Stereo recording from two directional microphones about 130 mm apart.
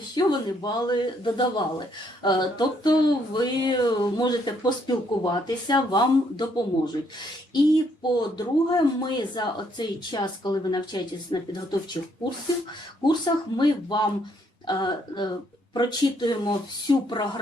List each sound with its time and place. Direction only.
0.1 s speech: 35° left (ahead or behind)
13.1 s speech: 35° left (ahead or behind)